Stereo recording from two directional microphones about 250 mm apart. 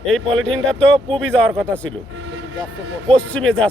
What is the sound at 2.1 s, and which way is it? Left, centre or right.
Vehicle, right.